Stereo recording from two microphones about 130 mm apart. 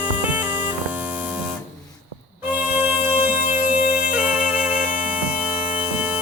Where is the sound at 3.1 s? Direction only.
15° right (ahead or behind).